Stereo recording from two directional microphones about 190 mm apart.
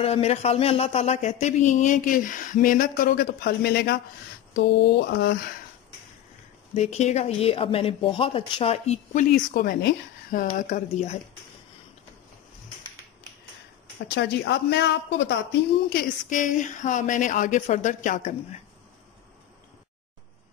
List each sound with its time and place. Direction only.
0.0 s speech: 35° left (ahead or behind); by 5.5 s 55° left (ahead or behind)
6.7 s speech: 35° left (ahead or behind)
14.1 s speech: 65° left (ahead or behind)
15.9 s speech: 45° left (ahead or behind)